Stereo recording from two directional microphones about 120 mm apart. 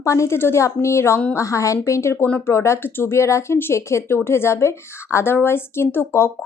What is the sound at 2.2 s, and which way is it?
Speech, 10° left (ahead or behind).